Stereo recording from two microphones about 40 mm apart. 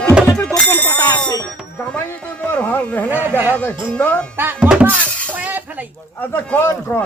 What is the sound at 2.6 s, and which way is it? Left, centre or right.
Speech, left.